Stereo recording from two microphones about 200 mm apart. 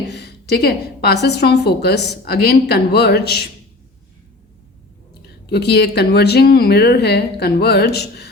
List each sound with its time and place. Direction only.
0.1 s a woman's voice: 55° left (ahead or behind)
5.5 s a woman's voice: 55° left (ahead or behind)